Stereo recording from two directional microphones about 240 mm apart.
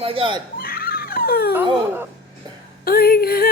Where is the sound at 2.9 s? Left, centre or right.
Left.